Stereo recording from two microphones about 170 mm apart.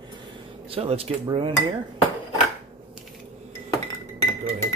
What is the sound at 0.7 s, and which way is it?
Speech, 35° right (ahead or behind).